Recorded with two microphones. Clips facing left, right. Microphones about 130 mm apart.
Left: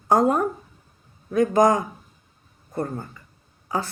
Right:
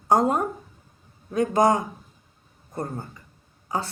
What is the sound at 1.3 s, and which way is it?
Speech, 30° right (ahead or behind).